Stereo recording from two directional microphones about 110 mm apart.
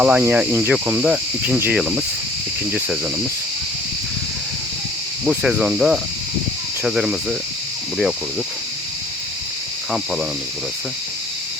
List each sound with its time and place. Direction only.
0.0 s speech: 15° right (ahead or behind)
1.8 s speech: 5° right (ahead or behind)
5.2 s speech: 10° right (ahead or behind)